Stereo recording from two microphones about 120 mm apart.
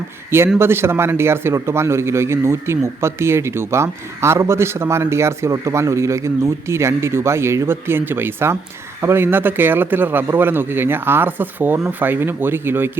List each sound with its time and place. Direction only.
0.3 s a man's voice: 20° right (ahead or behind)